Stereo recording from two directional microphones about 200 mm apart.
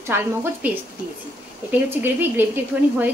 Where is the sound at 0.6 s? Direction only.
10° right (ahead or behind).